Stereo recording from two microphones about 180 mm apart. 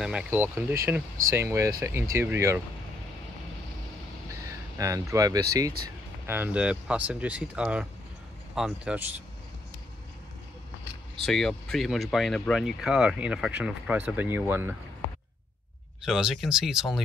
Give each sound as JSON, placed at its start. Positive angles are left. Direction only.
{"t": 0.0, "sound": "speech", "side_deg": -5}
{"t": 4.3, "sound": "speech", "side_deg": -15}
{"t": 11.2, "sound": "speech", "side_deg": 0}
{"t": 16.1, "sound": "speech", "side_deg": -5}